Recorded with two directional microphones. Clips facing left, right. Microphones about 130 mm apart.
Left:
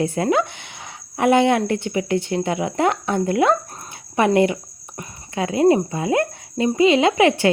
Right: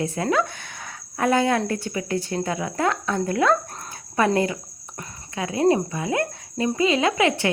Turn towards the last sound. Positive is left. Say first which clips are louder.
# left 5 dB
turn(degrees=25)  # may be behind; listen again after turning